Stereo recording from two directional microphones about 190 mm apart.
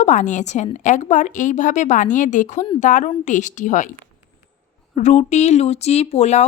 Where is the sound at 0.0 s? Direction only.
40° left (ahead or behind).